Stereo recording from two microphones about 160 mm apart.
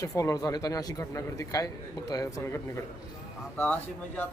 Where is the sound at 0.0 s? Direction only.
20° left (ahead or behind).